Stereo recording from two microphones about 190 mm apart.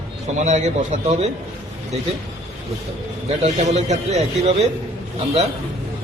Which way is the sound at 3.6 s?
35° right (ahead or behind).